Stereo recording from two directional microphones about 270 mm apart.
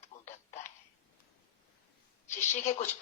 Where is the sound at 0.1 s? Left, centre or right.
Centre.